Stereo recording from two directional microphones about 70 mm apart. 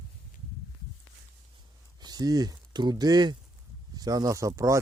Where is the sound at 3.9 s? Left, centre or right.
Right.